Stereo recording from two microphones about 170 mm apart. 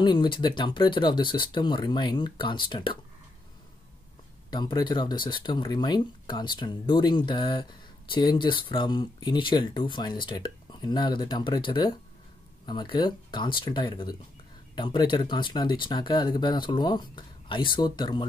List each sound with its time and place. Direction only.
0.0 s speech: 25° left (ahead or behind)
4.5 s speech: 25° left (ahead or behind)